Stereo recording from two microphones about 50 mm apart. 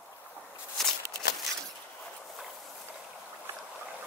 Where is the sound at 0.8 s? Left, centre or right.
Centre.